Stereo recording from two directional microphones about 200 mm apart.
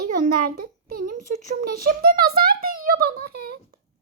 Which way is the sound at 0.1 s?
45° right (ahead or behind).